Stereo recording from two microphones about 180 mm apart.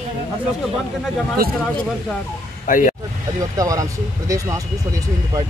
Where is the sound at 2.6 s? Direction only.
45° left (ahead or behind).